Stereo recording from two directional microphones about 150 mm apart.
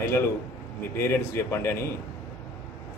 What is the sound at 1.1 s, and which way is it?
Speech, 15° left (ahead or behind).